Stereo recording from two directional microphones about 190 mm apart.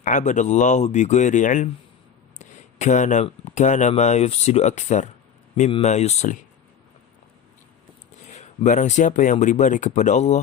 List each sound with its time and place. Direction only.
0.0 s speech: 40° left (ahead or behind)
8.3 s speech: 40° left (ahead or behind)